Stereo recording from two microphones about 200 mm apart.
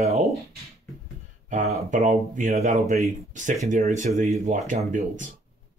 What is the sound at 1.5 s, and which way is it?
Speech, 35° right (ahead or behind).